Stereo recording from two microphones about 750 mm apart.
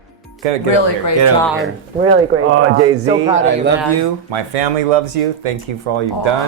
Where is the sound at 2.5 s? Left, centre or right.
Centre.